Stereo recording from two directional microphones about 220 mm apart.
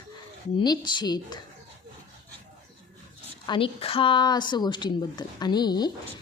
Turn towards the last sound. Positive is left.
turn(degrees=20)  # may be behind; listen again after turning